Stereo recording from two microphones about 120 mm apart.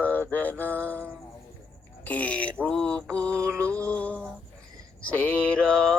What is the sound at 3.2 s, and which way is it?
Music, 25° right (ahead or behind).